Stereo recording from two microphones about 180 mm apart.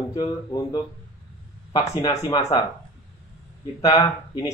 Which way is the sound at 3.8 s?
20° left (ahead or behind).